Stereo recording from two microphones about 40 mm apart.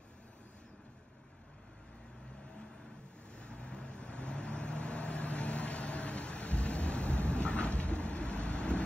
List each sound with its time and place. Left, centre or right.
3.3 s vehicle: left